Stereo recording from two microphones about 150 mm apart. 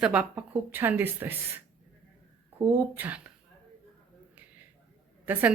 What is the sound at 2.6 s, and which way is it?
Speech, 15° right (ahead or behind).